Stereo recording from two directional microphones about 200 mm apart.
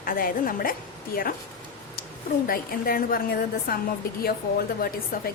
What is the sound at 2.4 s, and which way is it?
A woman's voice, 45° left (ahead or behind).